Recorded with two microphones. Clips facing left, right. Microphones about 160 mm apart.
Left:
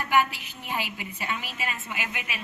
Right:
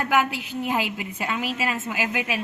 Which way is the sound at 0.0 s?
90° right.